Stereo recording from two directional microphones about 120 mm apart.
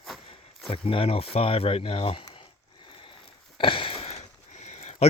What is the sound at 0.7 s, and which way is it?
Speech, 50° left (ahead or behind).